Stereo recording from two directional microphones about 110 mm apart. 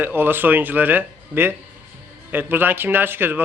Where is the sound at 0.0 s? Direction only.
20° right (ahead or behind).